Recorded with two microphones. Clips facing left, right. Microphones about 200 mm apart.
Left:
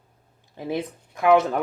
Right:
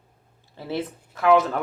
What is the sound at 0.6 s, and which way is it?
Speech, 15° left (ahead or behind).